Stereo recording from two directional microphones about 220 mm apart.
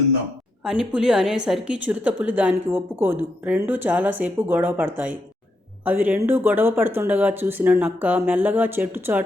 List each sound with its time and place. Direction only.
0.6 s a woman's voice: centre (ahead or behind)